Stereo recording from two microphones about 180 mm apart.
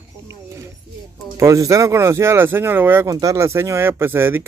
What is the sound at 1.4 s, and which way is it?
Speech, 15° right (ahead or behind).